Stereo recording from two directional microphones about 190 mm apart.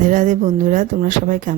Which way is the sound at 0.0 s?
40° right (ahead or behind).